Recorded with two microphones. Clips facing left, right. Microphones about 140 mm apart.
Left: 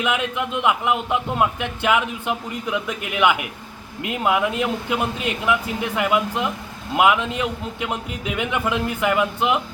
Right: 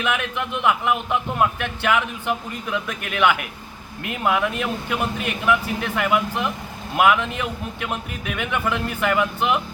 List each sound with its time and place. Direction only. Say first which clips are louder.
0.0 s a man's voice: left 2 dB; 15° left (ahead or behind)